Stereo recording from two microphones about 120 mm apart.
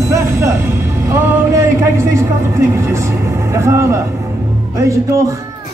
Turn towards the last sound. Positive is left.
turn(degrees=-25)  # may be behind; listen again after turning